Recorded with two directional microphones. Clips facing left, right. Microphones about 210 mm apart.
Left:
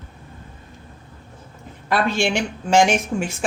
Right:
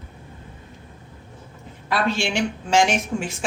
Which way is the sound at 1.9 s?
50° left (ahead or behind).